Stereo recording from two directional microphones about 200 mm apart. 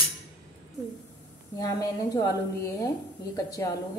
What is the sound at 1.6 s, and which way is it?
Speech, 15° left (ahead or behind).